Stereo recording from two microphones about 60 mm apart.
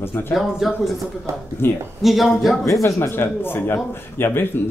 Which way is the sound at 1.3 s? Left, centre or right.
Right.